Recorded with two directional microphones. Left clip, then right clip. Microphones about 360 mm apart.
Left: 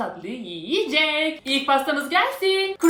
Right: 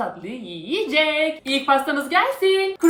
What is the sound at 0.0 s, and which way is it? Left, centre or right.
A woman's voice, centre.